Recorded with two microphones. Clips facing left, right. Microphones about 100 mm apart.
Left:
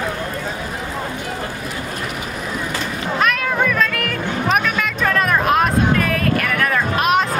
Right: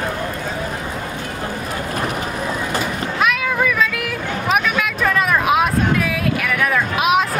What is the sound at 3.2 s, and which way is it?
Music, 5° right (ahead or behind).